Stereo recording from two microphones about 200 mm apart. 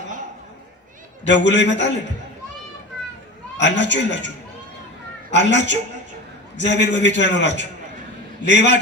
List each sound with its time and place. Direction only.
1.2 s a man's voice: 65° left (ahead or behind)
3.6 s a man's voice: 60° left (ahead or behind)
5.3 s a man's voice: 65° left (ahead or behind)